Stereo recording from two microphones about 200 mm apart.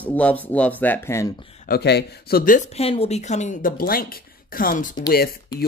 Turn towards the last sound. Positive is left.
turn(degrees=50)  # may be behind; listen again after turning